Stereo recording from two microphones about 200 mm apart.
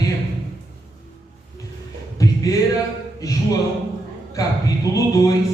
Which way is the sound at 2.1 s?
15° left (ahead or behind).